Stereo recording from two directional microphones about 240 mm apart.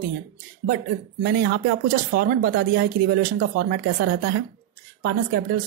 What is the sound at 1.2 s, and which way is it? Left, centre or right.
A woman's voice, right.